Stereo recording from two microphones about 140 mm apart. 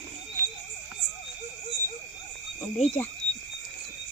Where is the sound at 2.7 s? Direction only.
50° left (ahead or behind).